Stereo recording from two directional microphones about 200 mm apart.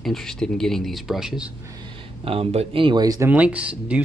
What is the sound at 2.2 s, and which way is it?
Speech, 30° right (ahead or behind).